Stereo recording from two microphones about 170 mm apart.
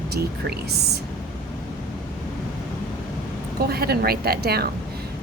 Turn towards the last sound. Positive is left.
turn(degrees=-65)  # may be behind; listen again after turning